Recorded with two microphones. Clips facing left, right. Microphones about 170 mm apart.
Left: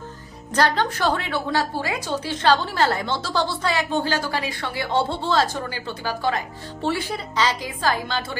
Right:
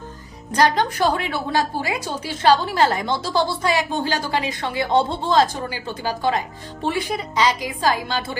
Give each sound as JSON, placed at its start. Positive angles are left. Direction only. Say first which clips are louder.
{"t": 0.5, "sound": "a woman's voice", "louder": "right 2 dB", "side_deg": -15}